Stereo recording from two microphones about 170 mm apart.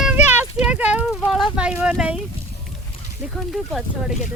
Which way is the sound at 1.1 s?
Centre (ahead or behind).